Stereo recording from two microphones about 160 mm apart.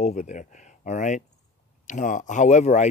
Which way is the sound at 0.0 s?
45° left (ahead or behind).